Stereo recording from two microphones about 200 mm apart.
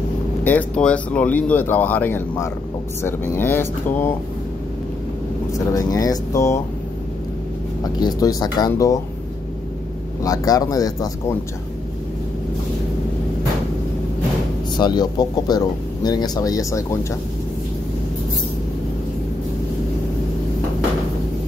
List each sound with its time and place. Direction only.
0.4 s speech: 10° left (ahead or behind)
5.5 s speech: 15° left (ahead or behind)
7.8 s speech: 20° left (ahead or behind)
10.2 s speech: 20° left (ahead or behind)
14.8 s speech: 20° left (ahead or behind)